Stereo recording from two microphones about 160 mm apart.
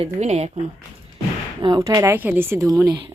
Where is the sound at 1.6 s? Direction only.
25° right (ahead or behind).